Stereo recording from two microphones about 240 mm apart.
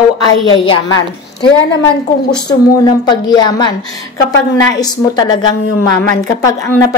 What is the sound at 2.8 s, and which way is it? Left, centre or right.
Speech, centre.